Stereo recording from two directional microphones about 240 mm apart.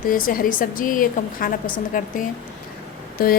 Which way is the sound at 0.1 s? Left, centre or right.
Left.